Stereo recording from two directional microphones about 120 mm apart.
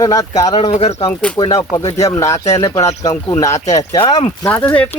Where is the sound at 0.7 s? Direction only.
65° left (ahead or behind).